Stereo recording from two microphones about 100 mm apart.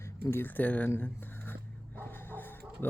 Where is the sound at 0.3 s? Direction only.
20° left (ahead or behind).